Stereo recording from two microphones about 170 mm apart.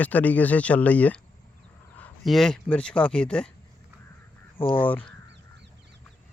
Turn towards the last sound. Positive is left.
turn(degrees=10)  # may be behind; listen again after turning